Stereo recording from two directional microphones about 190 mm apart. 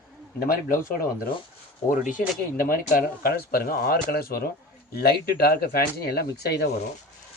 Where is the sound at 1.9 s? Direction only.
45° left (ahead or behind); by 6.7 s 60° left (ahead or behind).